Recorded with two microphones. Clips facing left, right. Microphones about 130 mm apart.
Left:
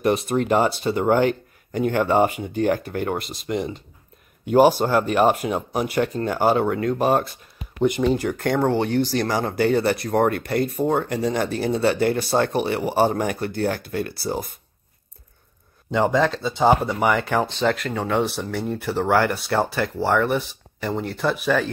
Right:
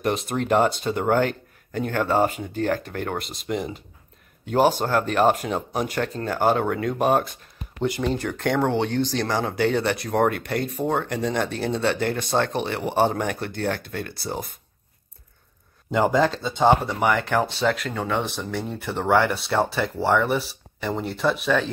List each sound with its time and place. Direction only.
0.0 s speech: centre (ahead or behind)
4.5 s speech: 10° left (ahead or behind)
7.8 s speech: 20° left (ahead or behind)
15.9 s speech: centre (ahead or behind)